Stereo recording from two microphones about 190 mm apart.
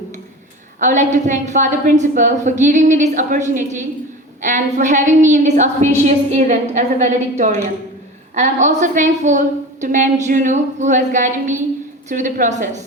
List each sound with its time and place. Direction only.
0.8 s a woman's voice: 40° right (ahead or behind)